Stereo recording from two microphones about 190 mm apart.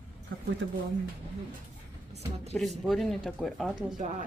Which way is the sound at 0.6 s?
75° right (ahead or behind).